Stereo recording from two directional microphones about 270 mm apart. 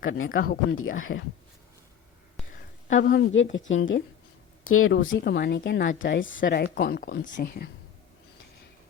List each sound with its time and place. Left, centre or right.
0.0 s speech: left
0.8 s speech: left
2.9 s speech: left
3.5 s speech: left
4.9 s speech: left